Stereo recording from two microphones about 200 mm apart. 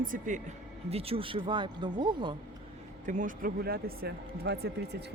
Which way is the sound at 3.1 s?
40° right (ahead or behind).